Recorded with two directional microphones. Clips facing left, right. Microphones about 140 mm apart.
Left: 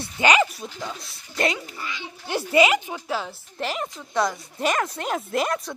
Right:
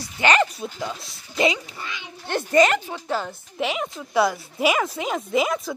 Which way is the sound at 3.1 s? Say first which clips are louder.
Right 3 dB; centre (ahead or behind).